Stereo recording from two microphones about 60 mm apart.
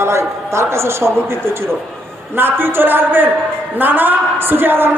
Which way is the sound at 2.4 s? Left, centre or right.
Right.